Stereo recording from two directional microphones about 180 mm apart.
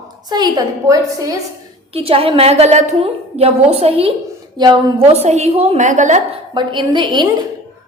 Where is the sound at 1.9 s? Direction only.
30° right (ahead or behind).